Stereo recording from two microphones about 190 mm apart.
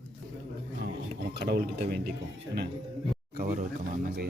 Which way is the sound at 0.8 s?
60° right (ahead or behind).